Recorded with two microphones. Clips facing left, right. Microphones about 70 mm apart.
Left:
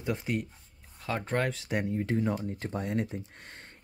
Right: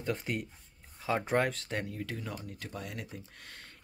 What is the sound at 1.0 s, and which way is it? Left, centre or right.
Speech, centre.